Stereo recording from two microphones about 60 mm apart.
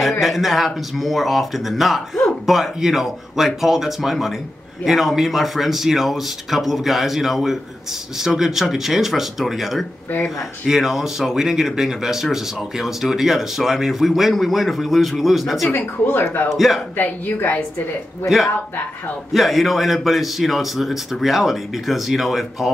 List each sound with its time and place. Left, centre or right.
0.2 s speech: centre
15.7 s speech: left
16.5 s speech: centre
16.9 s speech: left
19.3 s speech: centre